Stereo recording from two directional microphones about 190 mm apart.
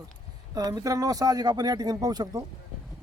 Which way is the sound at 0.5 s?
20° right (ahead or behind).